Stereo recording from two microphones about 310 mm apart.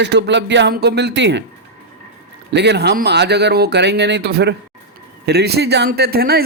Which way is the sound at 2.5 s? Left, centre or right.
Right.